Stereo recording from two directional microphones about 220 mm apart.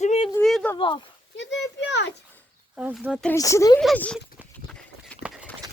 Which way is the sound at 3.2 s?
10° left (ahead or behind).